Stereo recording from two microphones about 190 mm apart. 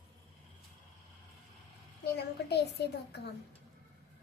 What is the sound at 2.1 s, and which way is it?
A child's voice, 60° left (ahead or behind).